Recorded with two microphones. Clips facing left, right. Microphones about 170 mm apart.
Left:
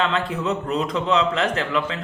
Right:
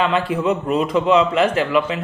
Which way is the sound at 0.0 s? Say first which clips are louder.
Right 4 dB; 10° right (ahead or behind).